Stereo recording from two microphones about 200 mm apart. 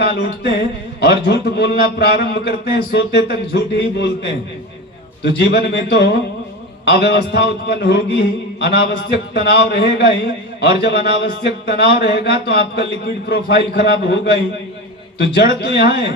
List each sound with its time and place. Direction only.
0.0 s a man's voice: 55° left (ahead or behind)